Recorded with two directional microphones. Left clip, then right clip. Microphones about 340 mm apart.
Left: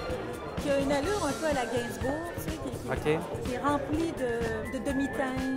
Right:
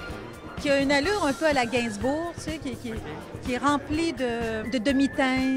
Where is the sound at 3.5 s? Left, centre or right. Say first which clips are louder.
Right 5 dB; right.